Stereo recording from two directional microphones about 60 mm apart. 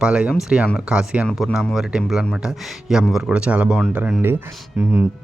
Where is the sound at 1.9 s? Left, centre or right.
Centre.